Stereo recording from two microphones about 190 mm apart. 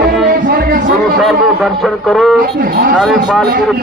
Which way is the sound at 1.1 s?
Centre (ahead or behind).